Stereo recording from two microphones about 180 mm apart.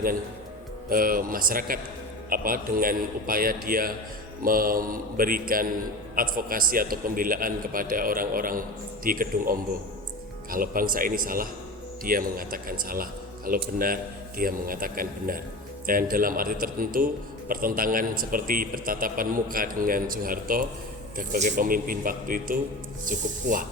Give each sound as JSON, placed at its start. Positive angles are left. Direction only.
{"t": 0.9, "sound": "speech", "side_deg": -50}